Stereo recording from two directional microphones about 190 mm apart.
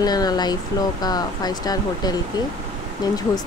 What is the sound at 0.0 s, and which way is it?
Speech, 20° left (ahead or behind).